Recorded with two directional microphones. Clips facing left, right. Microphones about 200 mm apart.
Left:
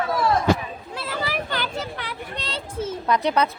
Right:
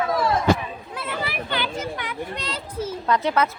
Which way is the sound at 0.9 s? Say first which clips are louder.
Left 2 dB; 35° left (ahead or behind).